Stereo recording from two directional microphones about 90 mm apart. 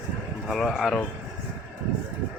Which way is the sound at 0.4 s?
Centre (ahead or behind).